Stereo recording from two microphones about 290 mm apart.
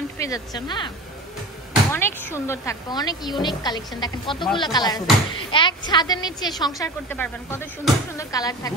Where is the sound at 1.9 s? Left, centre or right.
Centre.